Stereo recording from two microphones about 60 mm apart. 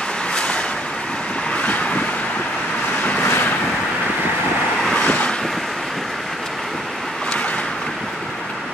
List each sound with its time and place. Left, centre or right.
0.3 s vehicle: centre
1.6 s vehicle: left
3.3 s vehicle: left
5.0 s vehicle: left